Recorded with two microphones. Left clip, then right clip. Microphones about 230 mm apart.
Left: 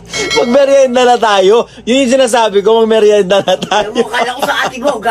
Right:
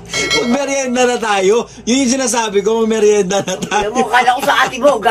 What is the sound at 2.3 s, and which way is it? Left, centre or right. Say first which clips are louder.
Speech: left 6 dB; right.